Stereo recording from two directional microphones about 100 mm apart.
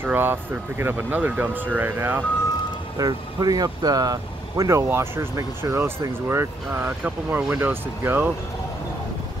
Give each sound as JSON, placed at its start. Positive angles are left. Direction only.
{"t": 0.0, "sound": "speech", "side_deg": -20}
{"t": 3.0, "sound": "speech", "side_deg": -40}